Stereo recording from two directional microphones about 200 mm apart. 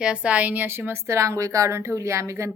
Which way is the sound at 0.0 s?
5° right (ahead or behind).